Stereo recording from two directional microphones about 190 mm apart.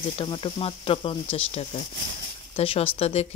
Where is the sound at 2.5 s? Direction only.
30° left (ahead or behind).